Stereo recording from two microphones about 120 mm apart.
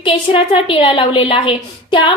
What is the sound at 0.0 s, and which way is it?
A woman's voice, 50° left (ahead or behind).